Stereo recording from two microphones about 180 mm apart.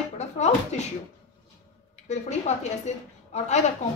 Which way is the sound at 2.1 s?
40° left (ahead or behind).